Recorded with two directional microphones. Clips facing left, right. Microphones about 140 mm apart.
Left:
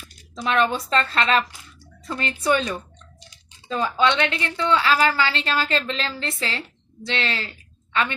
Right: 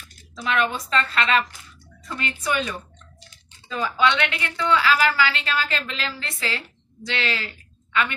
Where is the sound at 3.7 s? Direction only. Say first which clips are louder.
Left 1 dB; 30° left (ahead or behind).